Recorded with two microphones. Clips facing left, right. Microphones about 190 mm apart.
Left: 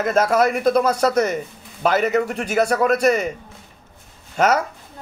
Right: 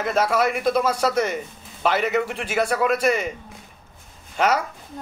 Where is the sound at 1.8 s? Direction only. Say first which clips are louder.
Left 3 dB; 45° left (ahead or behind).